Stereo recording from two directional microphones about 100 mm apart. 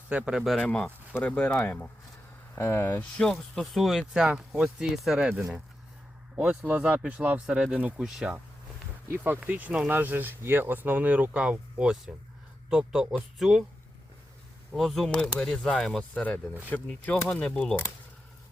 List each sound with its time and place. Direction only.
0.1 s speech: 10° right (ahead or behind)
0.6 s speech: 15° left (ahead or behind)
3.2 s speech: 5° left (ahead or behind)
6.7 s speech: 15° right (ahead or behind)
9.0 s speech: 25° right (ahead or behind); by 13.7 s centre (ahead or behind)
14.7 s speech: centre (ahead or behind)